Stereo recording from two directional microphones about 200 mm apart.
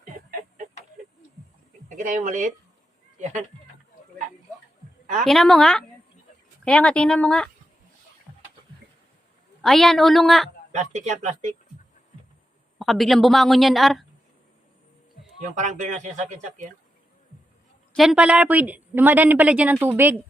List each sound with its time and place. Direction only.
0.3 s chicken: 45° right (ahead or behind)
1.9 s speech: 40° right (ahead or behind)
5.2 s speech: centre (ahead or behind)
9.6 s speech: centre (ahead or behind)
10.7 s speech: 35° right (ahead or behind)
12.8 s speech: centre (ahead or behind)
15.5 s speech: 35° right (ahead or behind)
17.9 s a woman's voice: centre (ahead or behind)